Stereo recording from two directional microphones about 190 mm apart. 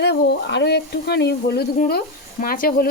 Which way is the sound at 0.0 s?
60° left (ahead or behind).